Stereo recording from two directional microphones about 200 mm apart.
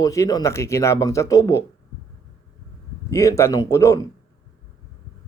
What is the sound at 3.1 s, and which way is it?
Speech, 15° left (ahead or behind).